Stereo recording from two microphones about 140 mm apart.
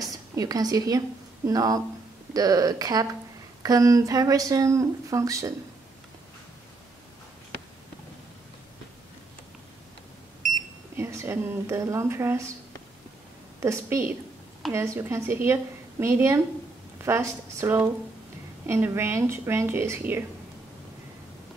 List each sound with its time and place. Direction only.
0.0 s a woman's voice: 25° right (ahead or behind)
11.0 s a woman's voice: 20° right (ahead or behind)
13.6 s a woman's voice: 20° right (ahead or behind)